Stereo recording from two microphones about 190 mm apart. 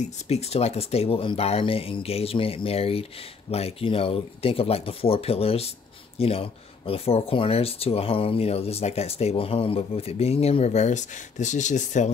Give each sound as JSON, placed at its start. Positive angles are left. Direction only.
{"t": 0.0, "sound": "speech", "side_deg": 35}